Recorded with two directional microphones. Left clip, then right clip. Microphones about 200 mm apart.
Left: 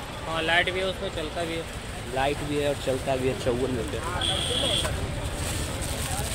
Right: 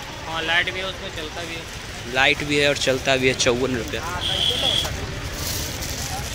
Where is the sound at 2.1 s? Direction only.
15° right (ahead or behind).